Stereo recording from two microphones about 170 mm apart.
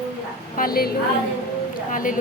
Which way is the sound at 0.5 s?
60° left (ahead or behind).